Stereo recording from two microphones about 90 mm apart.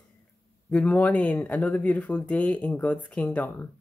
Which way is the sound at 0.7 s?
15° left (ahead or behind).